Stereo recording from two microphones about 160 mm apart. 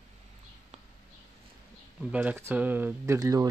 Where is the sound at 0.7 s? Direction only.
45° right (ahead or behind).